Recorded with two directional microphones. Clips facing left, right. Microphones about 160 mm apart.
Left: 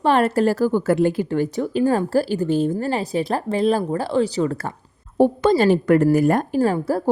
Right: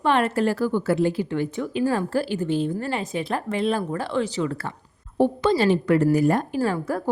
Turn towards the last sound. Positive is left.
turn(degrees=35)  # may be behind; listen again after turning